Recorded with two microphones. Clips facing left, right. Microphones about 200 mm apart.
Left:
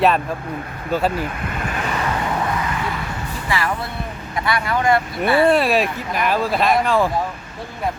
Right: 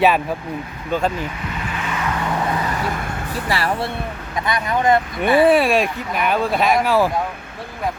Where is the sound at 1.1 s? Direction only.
55° left (ahead or behind).